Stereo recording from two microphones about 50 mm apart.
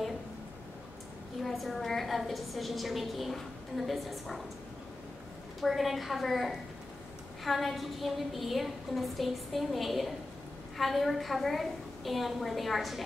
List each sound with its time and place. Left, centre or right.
1.4 s a woman's voice: centre
5.6 s a woman's voice: centre